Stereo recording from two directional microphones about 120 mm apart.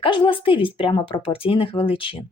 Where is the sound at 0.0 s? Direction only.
45° left (ahead or behind).